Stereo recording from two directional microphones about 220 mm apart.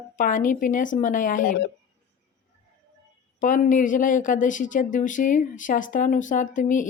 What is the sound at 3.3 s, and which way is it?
Speech, 35° left (ahead or behind).